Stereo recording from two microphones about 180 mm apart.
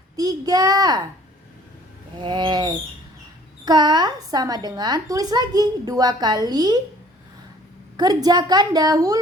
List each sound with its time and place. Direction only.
0.2 s a woman's voice: 20° right (ahead or behind)
2.2 s a woman's voice: 25° right (ahead or behind)
7.9 s a woman's voice: 20° right (ahead or behind)